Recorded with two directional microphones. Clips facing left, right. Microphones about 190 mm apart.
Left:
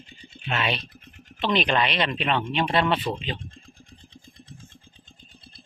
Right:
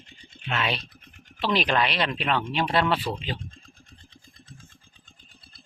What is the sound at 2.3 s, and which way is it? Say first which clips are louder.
Speech: left 1 dB; 20° left (ahead or behind).